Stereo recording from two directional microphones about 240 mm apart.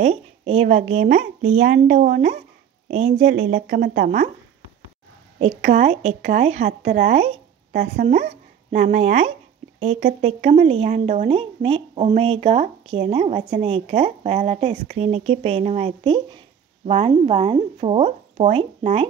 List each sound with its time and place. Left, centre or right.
0.0 s speech: right
3.5 s speech: right
5.4 s speech: right